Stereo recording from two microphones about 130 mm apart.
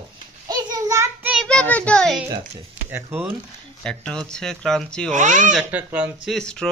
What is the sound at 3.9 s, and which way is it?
Speech, 5° left (ahead or behind).